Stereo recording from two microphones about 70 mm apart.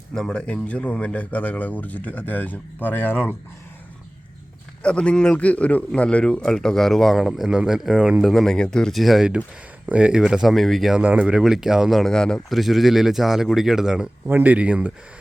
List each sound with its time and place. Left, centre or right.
0.1 s speech: centre; by 3.3 s left
4.8 s a man's voice: centre
8.2 s a man's voice: centre
9.0 s a man's voice: centre
9.8 s speech: centre
10.5 s a man's voice: centre
11.1 s speech: right
11.3 s speech: centre
12.1 s a man's voice: centre
12.5 s a man's voice: centre
14.3 s speech: right